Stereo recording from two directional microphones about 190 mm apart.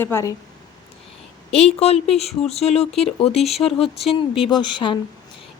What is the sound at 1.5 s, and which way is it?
Speech, 35° left (ahead or behind).